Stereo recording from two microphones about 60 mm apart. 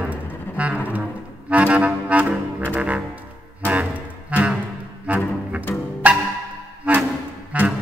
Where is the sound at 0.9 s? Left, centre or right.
Right.